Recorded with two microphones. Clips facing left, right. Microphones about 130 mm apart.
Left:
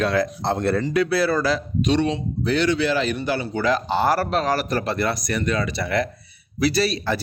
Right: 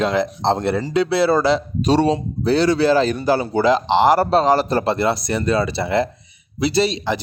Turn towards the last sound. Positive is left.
turn(degrees=-20)  # may be behind; listen again after turning